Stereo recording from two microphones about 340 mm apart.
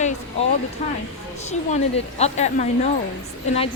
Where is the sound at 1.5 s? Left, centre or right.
Centre.